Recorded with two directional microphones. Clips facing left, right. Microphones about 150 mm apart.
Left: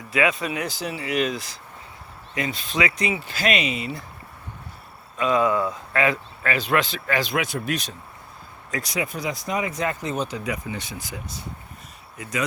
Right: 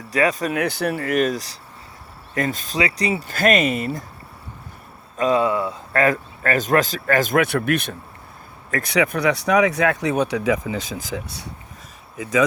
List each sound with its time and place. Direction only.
0.1 s speech: 40° right (ahead or behind)
0.6 s speech: 60° right (ahead or behind)
5.1 s cricket: 40° right (ahead or behind)
5.4 s speech: 25° right (ahead or behind)
5.9 s speech: 45° right (ahead or behind); by 11.4 s 80° right